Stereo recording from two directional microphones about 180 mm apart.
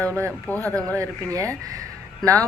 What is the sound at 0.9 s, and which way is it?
Speech, 20° right (ahead or behind).